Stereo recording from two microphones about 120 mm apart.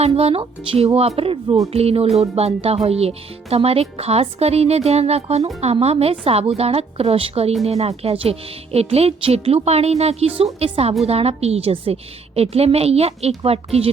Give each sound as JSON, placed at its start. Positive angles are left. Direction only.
{"t": 0.0, "sound": "speech", "side_deg": -55}